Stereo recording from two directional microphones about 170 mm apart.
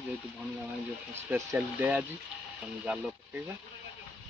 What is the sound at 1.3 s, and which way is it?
Speech, 10° right (ahead or behind).